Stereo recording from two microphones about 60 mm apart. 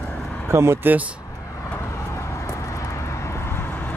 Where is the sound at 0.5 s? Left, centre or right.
Right.